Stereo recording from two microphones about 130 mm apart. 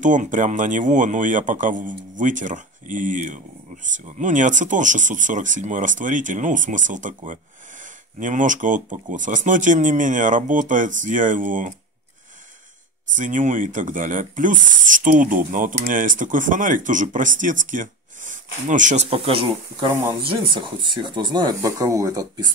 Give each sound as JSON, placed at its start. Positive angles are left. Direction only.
{"t": 0.0, "sound": "speech", "side_deg": -75}
{"t": 13.1, "sound": "speech", "side_deg": -75}
{"t": 19.0, "sound": "speech", "side_deg": -45}
{"t": 19.9, "sound": "speech", "side_deg": -20}
{"t": 20.2, "sound": "speech", "side_deg": -40}